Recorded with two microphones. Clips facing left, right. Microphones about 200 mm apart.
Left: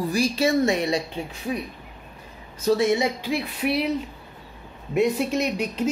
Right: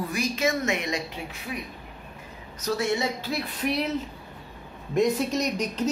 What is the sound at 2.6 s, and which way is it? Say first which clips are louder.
Speech: left 6 dB; 25° left (ahead or behind).